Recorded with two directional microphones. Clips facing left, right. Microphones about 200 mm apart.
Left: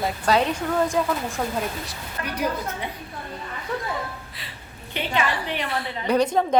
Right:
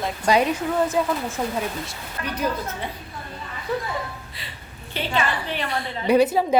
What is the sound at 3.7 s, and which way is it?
Chuckle, 5° right (ahead or behind).